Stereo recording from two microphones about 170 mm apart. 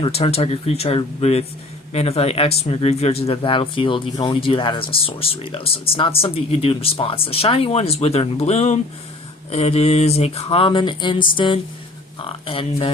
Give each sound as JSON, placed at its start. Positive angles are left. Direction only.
{"t": 0.0, "sound": "speech", "side_deg": 35}